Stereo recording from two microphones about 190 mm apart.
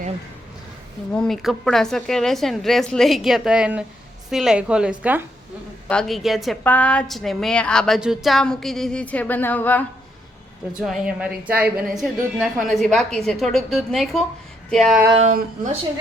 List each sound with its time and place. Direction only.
1.1 s a woman's voice: 5° left (ahead or behind)
10.8 s a woman's voice: centre (ahead or behind)
15.2 s speech: 40° right (ahead or behind)